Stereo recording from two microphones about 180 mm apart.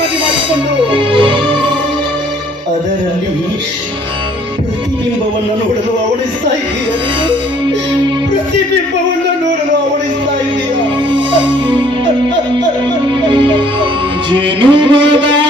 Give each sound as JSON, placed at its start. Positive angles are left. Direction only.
{"t": 0.5, "sound": "music", "side_deg": -30}
{"t": 11.1, "sound": "music", "side_deg": -25}
{"t": 13.2, "sound": "music", "side_deg": -25}